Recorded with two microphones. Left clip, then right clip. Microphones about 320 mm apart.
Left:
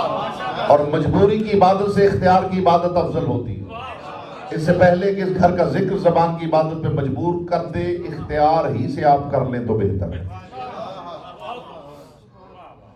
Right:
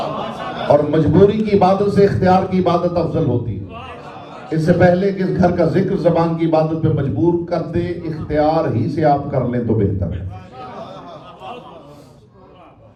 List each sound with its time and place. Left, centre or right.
0.5 s a man's voice: left
4.4 s a man's voice: left